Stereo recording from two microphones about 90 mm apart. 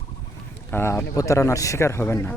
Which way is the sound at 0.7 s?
25° left (ahead or behind).